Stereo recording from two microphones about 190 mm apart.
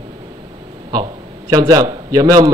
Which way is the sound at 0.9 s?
20° right (ahead or behind).